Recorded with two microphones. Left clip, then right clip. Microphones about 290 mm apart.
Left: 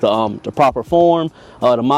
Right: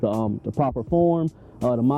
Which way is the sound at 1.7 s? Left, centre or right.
Centre.